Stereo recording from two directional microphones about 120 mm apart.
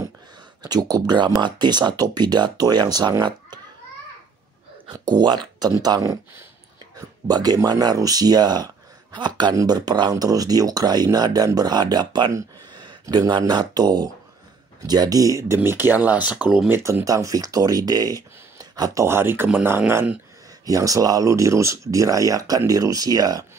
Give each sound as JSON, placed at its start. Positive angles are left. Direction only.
{"t": 0.6, "sound": "speech", "side_deg": -35}
{"t": 4.9, "sound": "speech", "side_deg": -35}
{"t": 16.7, "sound": "speech", "side_deg": -20}
{"t": 20.6, "sound": "speech", "side_deg": -30}